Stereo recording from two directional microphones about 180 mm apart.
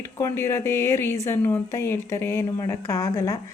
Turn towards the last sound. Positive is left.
turn(degrees=20)  # may be behind; listen again after turning